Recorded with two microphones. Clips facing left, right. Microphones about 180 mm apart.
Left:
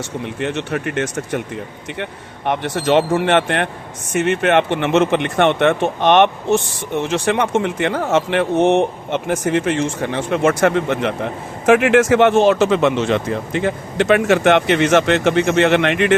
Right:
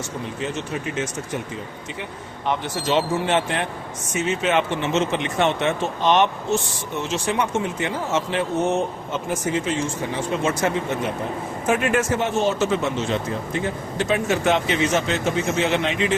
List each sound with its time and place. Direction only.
0.3 s speech: 65° left (ahead or behind)
2.5 s speech: 65° left (ahead or behind)